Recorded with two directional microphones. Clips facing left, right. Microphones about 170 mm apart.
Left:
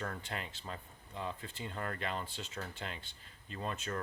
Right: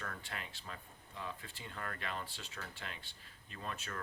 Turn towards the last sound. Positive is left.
turn(degrees=25)  # may be behind; listen again after turning